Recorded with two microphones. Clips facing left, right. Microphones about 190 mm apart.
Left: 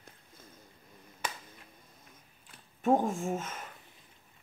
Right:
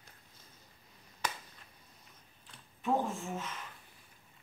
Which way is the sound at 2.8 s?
50° left (ahead or behind).